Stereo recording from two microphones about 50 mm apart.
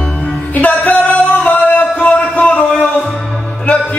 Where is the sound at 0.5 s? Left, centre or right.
Left.